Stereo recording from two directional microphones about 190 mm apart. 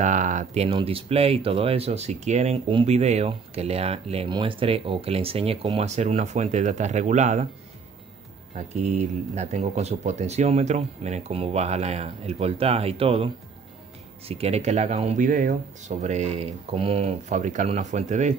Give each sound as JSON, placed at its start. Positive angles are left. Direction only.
{"t": 0.0, "sound": "speech", "side_deg": -40}
{"t": 8.5, "sound": "speech", "side_deg": -35}